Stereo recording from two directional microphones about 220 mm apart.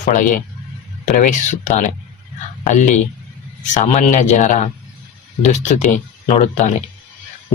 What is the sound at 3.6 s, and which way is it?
Speech, 35° left (ahead or behind).